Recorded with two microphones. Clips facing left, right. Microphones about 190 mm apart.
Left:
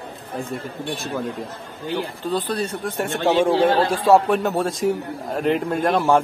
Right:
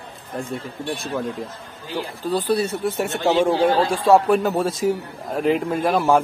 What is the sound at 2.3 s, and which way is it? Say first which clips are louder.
A man's voice: right 4 dB; 10° right (ahead or behind).